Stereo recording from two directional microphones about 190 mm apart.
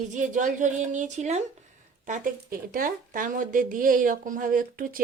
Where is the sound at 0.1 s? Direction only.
40° right (ahead or behind).